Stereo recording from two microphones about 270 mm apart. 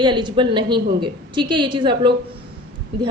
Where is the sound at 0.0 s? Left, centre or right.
Centre.